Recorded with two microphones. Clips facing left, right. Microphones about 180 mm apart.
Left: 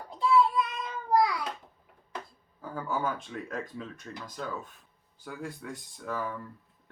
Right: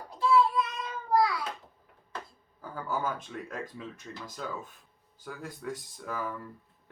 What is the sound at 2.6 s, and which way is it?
Speech, centre (ahead or behind).